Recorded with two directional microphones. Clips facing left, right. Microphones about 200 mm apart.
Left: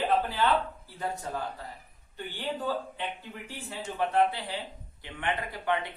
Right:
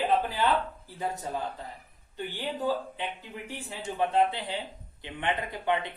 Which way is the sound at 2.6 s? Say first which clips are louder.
Right 5 dB; 15° right (ahead or behind).